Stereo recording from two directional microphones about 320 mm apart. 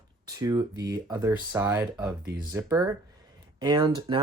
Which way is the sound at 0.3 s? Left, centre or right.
Centre.